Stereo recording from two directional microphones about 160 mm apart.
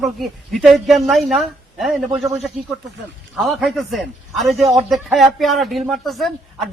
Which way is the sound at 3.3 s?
Centre (ahead or behind).